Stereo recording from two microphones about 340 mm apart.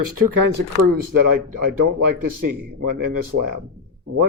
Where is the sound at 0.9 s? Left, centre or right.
Right.